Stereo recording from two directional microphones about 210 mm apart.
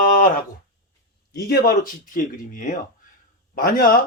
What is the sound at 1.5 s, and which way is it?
Speech, 45° left (ahead or behind).